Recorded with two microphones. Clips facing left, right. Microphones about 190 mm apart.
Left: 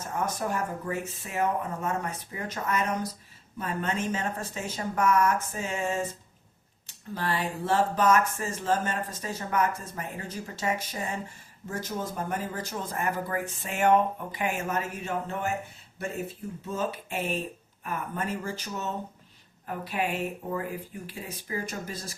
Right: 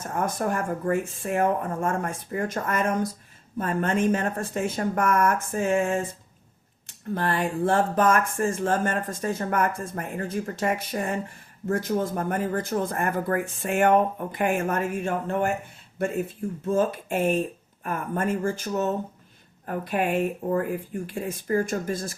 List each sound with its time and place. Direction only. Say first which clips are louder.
0.0 s speech: right 4 dB; 50° right (ahead or behind)
7.1 s speech: right 5 dB; 55° right (ahead or behind)
16.6 s speech: right 8 dB; 50° right (ahead or behind)